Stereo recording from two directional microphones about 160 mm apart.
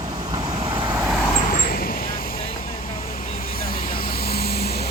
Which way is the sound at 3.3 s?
65° left (ahead or behind).